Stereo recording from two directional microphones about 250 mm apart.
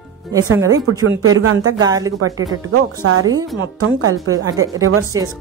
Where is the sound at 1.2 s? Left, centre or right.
Right.